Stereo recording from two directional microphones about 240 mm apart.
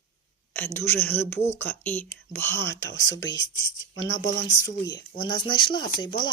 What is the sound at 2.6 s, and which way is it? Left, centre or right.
Speech, left.